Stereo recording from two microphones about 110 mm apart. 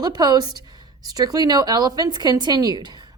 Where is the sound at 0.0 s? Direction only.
40° right (ahead or behind).